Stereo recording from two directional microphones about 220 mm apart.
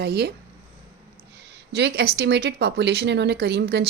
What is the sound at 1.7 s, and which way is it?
Speech, 50° right (ahead or behind).